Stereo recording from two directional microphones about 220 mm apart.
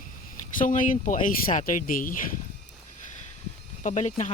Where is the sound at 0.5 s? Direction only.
35° left (ahead or behind).